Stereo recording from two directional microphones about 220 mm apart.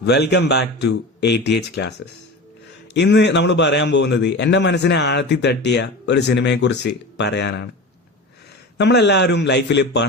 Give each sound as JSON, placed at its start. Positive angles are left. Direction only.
{"t": 0.0, "sound": "a man's voice", "side_deg": 50}
{"t": 2.9, "sound": "a man's voice", "side_deg": 50}
{"t": 8.8, "sound": "a man's voice", "side_deg": 50}